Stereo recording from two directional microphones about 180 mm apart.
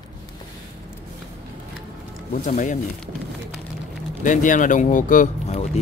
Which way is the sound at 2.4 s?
45° left (ahead or behind).